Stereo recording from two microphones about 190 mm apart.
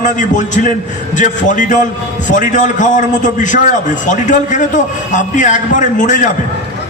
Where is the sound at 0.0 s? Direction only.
40° left (ahead or behind).